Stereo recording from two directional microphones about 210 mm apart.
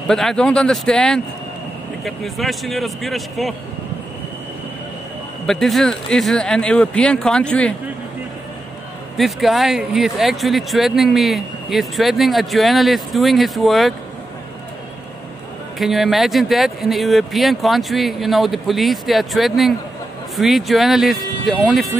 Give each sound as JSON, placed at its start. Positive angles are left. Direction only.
{"t": 0.1, "sound": "speech", "side_deg": 0}
{"t": 5.5, "sound": "speech", "side_deg": 0}
{"t": 9.1, "sound": "speech", "side_deg": 0}
{"t": 15.8, "sound": "speech", "side_deg": 0}